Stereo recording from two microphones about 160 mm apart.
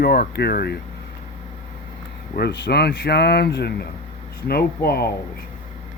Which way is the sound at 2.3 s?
90° left.